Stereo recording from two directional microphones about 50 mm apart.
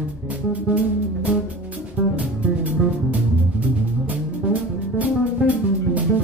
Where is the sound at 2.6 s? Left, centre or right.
Right.